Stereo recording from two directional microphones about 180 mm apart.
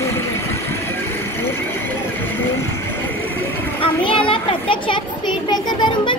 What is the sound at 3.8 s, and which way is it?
Children playing, 30° left (ahead or behind).